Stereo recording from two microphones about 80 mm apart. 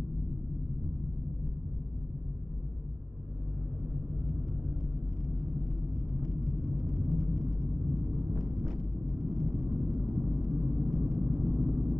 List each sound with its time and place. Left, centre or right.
6.2 s vehicle: centre